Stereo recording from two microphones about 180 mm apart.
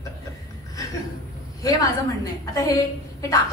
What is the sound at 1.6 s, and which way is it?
A woman's voice, 20° left (ahead or behind).